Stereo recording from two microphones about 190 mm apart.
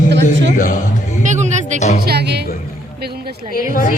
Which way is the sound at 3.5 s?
50° left (ahead or behind).